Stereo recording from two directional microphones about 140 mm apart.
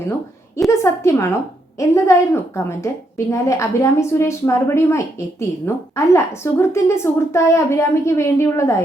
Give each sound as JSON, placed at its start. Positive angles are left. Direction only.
{"t": 0.7, "sound": "a woman's voice", "side_deg": 20}